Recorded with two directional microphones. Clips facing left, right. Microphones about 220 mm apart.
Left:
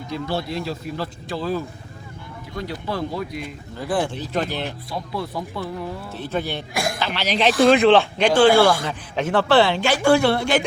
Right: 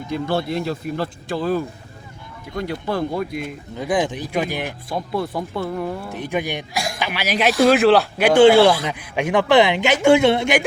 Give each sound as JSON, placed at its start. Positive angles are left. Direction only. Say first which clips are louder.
{"t": 0.1, "sound": "a man's voice", "louder": "right 4 dB", "side_deg": -55}
{"t": 3.8, "sound": "speech", "louder": "right 2 dB", "side_deg": -20}
{"t": 4.9, "sound": "a man's voice", "louder": "right 4 dB", "side_deg": -50}
{"t": 6.1, "sound": "speech", "louder": "right 2 dB", "side_deg": -15}
{"t": 6.7, "sound": "a woman's voice", "louder": "left 4 dB", "side_deg": 55}
{"t": 7.0, "sound": "speech", "louder": "right 1 dB", "side_deg": -10}
{"t": 8.4, "sound": "speech", "louder": "right 4 dB", "side_deg": -20}